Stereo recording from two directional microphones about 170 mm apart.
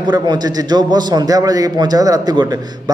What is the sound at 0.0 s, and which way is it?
A man's voice, 25° right (ahead or behind).